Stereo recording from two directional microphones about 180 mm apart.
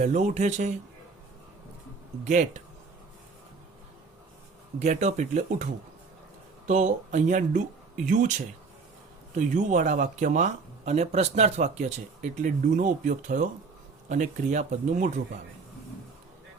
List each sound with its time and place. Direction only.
0.0 s speech: 40° right (ahead or behind)
2.2 s speech: 45° right (ahead or behind)
4.8 s speech: 40° right (ahead or behind)
9.6 s speech: 45° right (ahead or behind)